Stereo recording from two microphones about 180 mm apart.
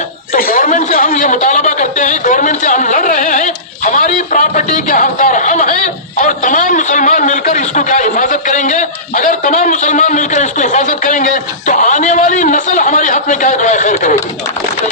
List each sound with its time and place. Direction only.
0.3 s a man's voice: 50° left (ahead or behind)